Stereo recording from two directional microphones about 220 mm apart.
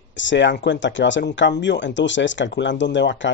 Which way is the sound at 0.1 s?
55° left (ahead or behind).